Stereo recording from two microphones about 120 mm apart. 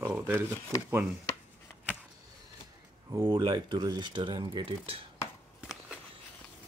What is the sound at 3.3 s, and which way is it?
Speech, 40° right (ahead or behind).